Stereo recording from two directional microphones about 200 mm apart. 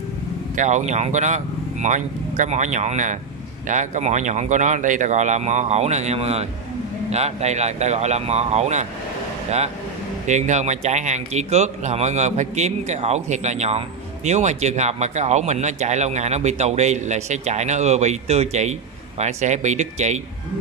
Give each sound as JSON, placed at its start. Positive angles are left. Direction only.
{"t": 0.6, "sound": "speech", "side_deg": -35}
{"t": 10.2, "sound": "speech", "side_deg": -35}